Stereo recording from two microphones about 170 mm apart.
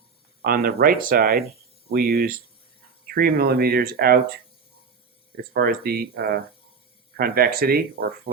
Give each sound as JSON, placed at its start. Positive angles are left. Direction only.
{"t": 0.4, "sound": "speech", "side_deg": -60}
{"t": 5.4, "sound": "speech", "side_deg": -65}